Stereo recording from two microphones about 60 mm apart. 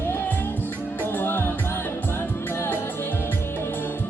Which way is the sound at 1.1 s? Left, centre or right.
Left.